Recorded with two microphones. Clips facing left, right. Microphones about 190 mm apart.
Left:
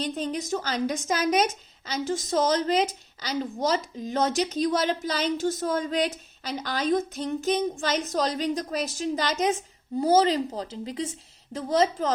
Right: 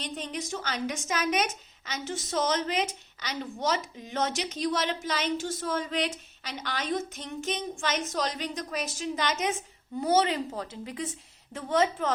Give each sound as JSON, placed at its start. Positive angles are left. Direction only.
{"t": 0.0, "sound": "a woman's voice", "side_deg": 35}